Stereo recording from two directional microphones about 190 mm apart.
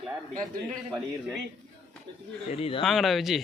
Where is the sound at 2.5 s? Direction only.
30° left (ahead or behind).